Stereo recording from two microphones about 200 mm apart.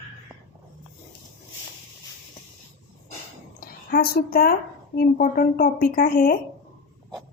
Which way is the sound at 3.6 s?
45° left (ahead or behind).